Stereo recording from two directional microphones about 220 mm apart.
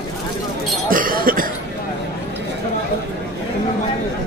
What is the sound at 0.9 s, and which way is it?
Basketball bounce, 40° right (ahead or behind).